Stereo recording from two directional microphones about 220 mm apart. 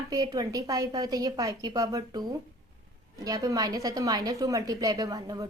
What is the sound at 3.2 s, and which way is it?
A woman's voice, 15° right (ahead or behind).